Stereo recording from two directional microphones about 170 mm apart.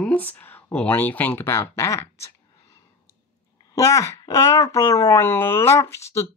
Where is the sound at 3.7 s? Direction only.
20° left (ahead or behind).